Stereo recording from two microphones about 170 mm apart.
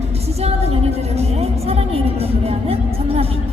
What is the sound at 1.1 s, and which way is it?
Music, 35° right (ahead or behind).